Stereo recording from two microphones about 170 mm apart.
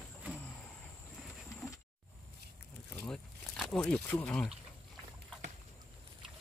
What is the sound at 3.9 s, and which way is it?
Speech, 10° left (ahead or behind).